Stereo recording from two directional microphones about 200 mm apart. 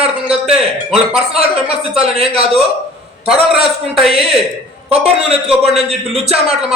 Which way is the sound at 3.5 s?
Centre (ahead or behind).